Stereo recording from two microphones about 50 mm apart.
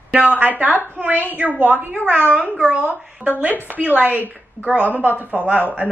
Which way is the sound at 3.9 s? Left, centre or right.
Right.